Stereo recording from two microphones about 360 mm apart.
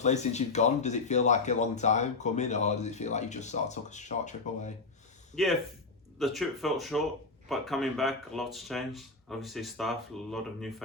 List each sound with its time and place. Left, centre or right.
0.0 s speech: centre
5.3 s speech: centre